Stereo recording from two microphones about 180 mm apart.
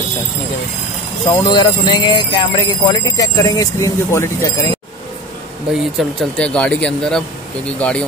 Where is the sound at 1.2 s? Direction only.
20° left (ahead or behind).